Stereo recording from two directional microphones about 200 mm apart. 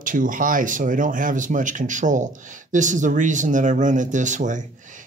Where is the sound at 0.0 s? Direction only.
40° right (ahead or behind).